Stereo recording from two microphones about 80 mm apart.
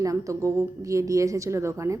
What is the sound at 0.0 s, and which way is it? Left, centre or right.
A woman's voice, right.